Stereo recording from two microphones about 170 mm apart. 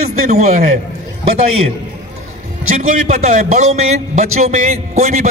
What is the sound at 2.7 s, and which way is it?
A man's voice, 50° right (ahead or behind).